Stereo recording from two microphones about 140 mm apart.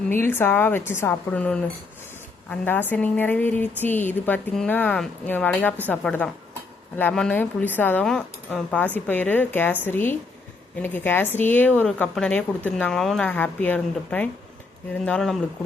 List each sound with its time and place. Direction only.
0.1 s a woman's voice: 15° left (ahead or behind)